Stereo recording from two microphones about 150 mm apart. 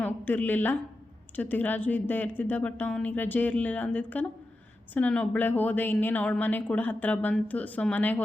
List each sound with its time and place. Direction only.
0.0 s a woman's voice: 10° left (ahead or behind)